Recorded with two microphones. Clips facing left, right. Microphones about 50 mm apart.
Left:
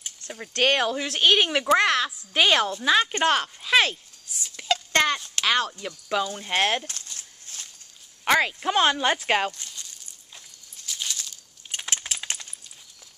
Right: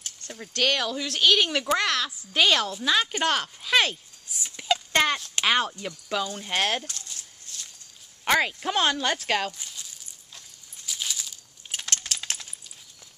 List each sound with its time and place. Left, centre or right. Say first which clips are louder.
0.4 s speech: left 3 dB; left; by 4.0 s centre
4.6 s a sound: left 1 dB; centre
5.3 s speech: even; centre
5.7 s speech: left 2 dB; centre
7.2 s walk: left 1 dB; left
8.3 s speech: left 2 dB; centre
9.5 s a sound: left 1 dB; centre
11.8 s typing: left 1 dB; centre